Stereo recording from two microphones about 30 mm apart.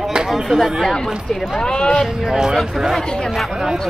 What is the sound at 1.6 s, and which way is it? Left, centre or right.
Speech, left.